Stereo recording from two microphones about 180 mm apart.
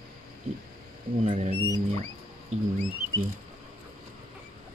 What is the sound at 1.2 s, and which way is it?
Speech, 35° right (ahead or behind).